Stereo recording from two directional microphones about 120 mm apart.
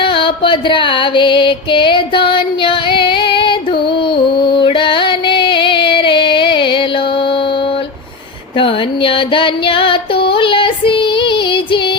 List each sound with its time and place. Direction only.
0.0 s music: 45° left (ahead or behind)
8.5 s female singing: 45° left (ahead or behind)